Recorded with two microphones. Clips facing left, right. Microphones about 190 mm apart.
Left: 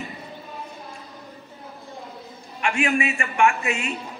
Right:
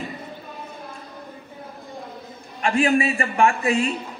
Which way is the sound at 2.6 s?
35° right (ahead or behind).